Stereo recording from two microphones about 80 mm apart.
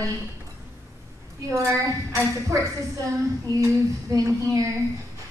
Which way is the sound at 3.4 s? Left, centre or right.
Right.